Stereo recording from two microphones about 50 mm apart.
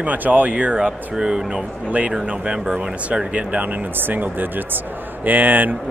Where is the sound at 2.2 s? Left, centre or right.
Right.